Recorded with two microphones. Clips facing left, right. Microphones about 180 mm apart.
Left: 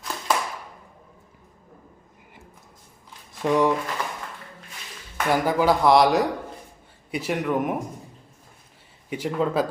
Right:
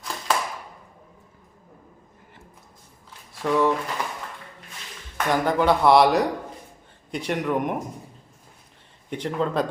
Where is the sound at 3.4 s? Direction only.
15° left (ahead or behind).